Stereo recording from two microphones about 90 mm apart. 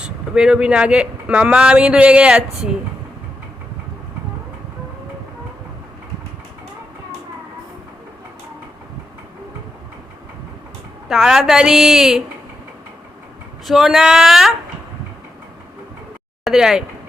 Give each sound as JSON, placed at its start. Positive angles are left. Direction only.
{"t": 0.0, "sound": "speech", "side_deg": -10}
{"t": 11.1, "sound": "a woman's voice", "side_deg": -5}
{"t": 13.7, "sound": "a woman's voice", "side_deg": -5}
{"t": 16.4, "sound": "speech", "side_deg": -5}